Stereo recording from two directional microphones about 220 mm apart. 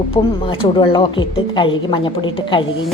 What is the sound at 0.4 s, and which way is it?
A woman's voice, 20° left (ahead or behind).